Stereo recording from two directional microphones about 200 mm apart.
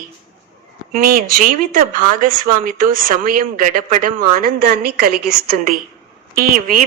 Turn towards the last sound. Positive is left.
turn(degrees=-45)  # may be behind; listen again after turning